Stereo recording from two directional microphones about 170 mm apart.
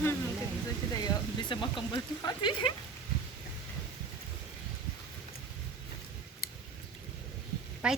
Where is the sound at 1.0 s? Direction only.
25° left (ahead or behind).